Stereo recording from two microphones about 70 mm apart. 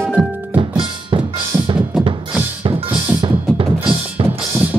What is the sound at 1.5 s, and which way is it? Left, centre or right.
Music, centre.